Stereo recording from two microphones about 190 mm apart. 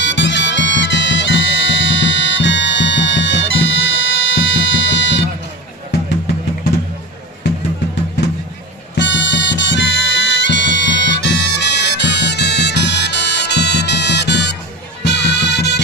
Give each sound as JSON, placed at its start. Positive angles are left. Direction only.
{"t": 0.0, "sound": "music", "side_deg": 70}
{"t": 9.0, "sound": "music", "side_deg": 70}